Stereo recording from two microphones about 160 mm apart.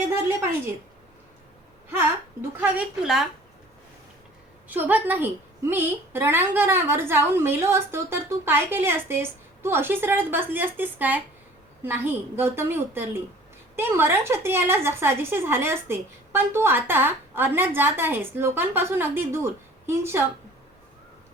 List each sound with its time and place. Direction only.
1.9 s a woman's voice: 15° right (ahead or behind)
4.7 s a woman's voice: 10° right (ahead or behind)